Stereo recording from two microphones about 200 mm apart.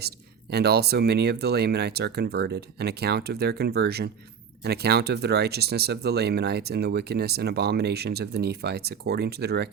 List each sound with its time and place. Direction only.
0.5 s speech: 55° right (ahead or behind)